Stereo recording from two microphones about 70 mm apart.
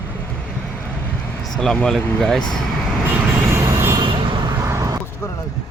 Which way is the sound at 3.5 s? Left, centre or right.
Right.